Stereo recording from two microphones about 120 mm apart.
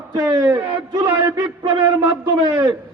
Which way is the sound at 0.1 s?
30° right (ahead or behind).